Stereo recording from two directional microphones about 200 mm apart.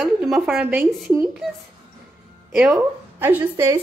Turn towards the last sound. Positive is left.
turn(degrees=-10)  # may be behind; listen again after turning